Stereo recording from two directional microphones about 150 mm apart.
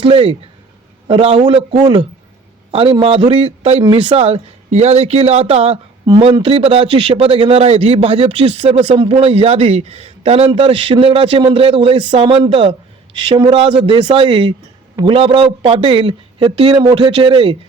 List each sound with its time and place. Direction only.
0.0 s speech: 40° right (ahead or behind)
3.8 s speech: 30° right (ahead or behind)
4.1 s speech: 45° right (ahead or behind)